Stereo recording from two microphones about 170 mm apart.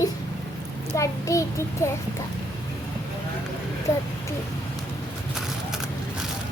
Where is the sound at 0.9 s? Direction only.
20° left (ahead or behind).